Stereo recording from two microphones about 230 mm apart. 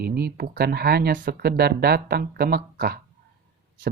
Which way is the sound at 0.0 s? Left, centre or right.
Right.